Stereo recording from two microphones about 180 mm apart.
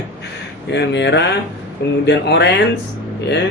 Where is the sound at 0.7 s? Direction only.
70° left (ahead or behind).